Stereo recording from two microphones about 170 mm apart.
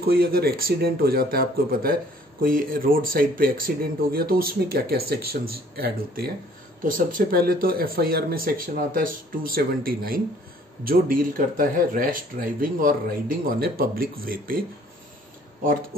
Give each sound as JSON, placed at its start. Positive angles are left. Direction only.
{"t": 0.1, "sound": "speech", "side_deg": -65}